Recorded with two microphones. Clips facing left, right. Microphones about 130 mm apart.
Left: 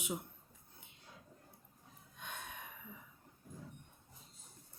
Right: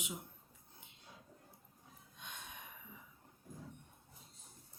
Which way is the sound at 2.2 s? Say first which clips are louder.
Left 4 dB; 55° left (ahead or behind).